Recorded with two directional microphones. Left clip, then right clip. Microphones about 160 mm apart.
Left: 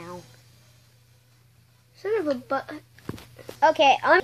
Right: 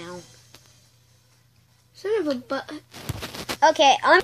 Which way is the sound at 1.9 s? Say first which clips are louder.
Right 1 dB; 60° right (ahead or behind).